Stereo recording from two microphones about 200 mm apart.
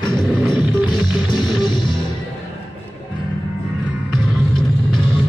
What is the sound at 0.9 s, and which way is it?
Music, 25° left (ahead or behind).